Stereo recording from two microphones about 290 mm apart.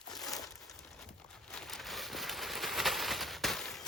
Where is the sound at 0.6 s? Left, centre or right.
Centre.